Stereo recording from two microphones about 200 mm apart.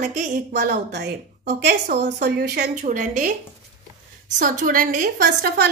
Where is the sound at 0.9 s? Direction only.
55° right (ahead or behind).